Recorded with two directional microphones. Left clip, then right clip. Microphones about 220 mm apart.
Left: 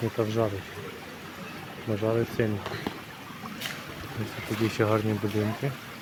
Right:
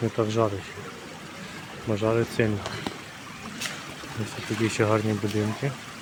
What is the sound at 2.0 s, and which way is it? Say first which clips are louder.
Speech: right 3 dB; 20° right (ahead or behind).